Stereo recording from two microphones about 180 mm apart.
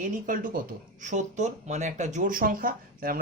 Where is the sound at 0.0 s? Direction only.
45° right (ahead or behind).